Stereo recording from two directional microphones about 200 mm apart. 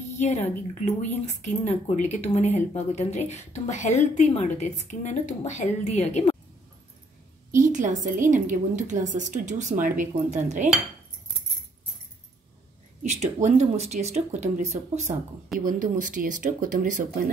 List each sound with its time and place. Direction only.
0.2 s a woman's voice: 35° left (ahead or behind)
7.5 s a woman's voice: 40° right (ahead or behind)
13.0 s a woman's voice: 35° right (ahead or behind)